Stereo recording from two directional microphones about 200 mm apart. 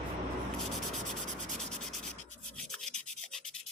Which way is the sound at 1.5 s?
Centre (ahead or behind).